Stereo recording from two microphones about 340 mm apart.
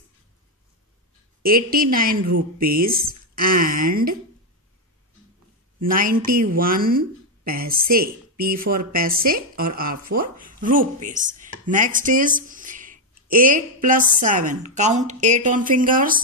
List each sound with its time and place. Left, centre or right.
1.4 s speech: right
5.9 s speech: right